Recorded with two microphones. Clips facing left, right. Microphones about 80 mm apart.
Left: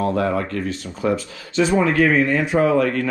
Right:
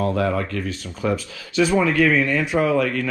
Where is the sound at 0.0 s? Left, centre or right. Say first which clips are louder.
Left 1 dB; left.